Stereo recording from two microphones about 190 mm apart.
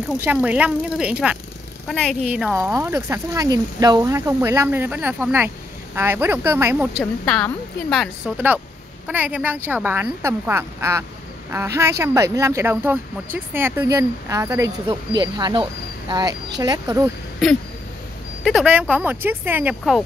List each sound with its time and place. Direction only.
0.2 s a woman's voice: 10° right (ahead or behind)
2.7 s speech: 15° right (ahead or behind)
7.0 s a woman's voice: 5° left (ahead or behind)
9.0 s speech: 10° right (ahead or behind)
18.4 s speech: 5° right (ahead or behind)